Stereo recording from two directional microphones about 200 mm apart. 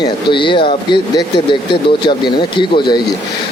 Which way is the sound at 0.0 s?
25° left (ahead or behind).